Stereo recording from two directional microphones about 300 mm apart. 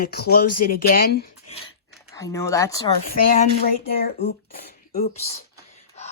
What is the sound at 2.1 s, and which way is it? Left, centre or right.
Speech, centre.